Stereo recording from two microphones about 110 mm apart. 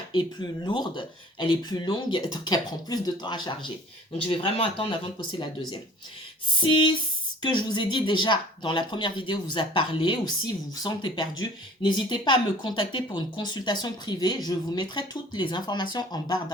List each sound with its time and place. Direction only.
0.1 s speech: 45° left (ahead or behind)
4.2 s speech: 55° left (ahead or behind); by 16.4 s 40° left (ahead or behind)